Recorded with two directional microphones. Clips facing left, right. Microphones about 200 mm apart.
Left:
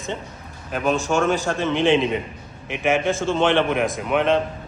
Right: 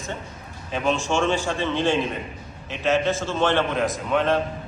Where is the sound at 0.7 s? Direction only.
5° left (ahead or behind).